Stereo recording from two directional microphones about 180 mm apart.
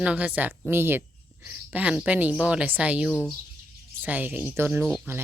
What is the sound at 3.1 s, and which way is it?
Speech, 10° left (ahead or behind).